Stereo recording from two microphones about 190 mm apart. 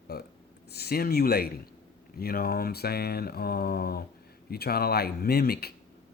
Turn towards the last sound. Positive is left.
turn(degrees=55)  # may be behind; listen again after turning